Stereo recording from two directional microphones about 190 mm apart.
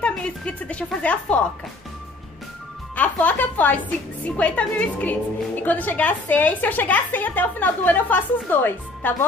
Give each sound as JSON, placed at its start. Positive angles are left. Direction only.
{"t": 0.0, "sound": "a woman's voice", "side_deg": 5}
{"t": 3.0, "sound": "a woman's voice", "side_deg": 10}